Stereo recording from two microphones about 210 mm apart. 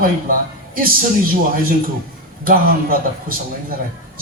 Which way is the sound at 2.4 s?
40° right (ahead or behind).